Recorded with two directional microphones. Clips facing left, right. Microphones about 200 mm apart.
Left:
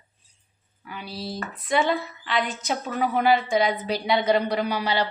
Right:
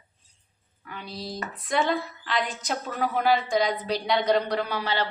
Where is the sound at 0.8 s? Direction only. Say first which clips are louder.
Left 2 dB; 10° left (ahead or behind).